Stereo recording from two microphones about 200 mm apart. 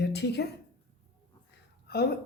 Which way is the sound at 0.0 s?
55° left (ahead or behind).